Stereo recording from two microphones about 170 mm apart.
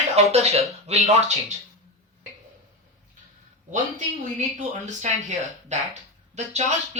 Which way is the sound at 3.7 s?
45° right (ahead or behind).